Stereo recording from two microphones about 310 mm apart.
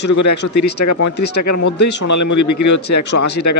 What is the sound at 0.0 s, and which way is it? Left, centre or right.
Speech, left.